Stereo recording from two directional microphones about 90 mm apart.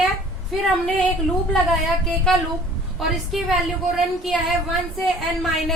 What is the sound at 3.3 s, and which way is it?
Speech, centre (ahead or behind).